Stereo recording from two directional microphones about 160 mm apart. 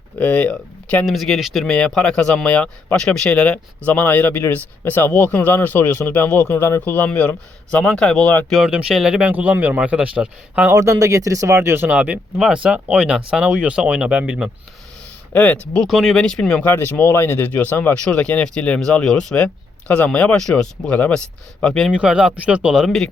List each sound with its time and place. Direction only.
0.2 s speech: 10° left (ahead or behind)
8.5 s speech: 5° right (ahead or behind)
10.8 s speech: 20° right (ahead or behind)
15.3 s speech: 10° left (ahead or behind)